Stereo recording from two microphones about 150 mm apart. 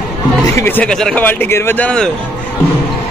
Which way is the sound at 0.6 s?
15° left (ahead or behind).